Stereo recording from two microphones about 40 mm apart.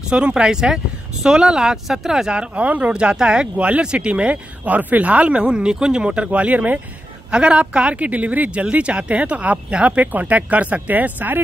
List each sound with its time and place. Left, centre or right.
0.1 s speech: right
2.3 s speech: right
2.9 s speech: right
7.2 s speech: right